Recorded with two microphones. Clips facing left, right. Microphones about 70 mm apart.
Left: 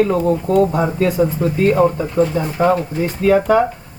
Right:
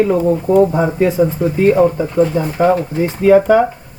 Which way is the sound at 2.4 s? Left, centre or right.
Centre.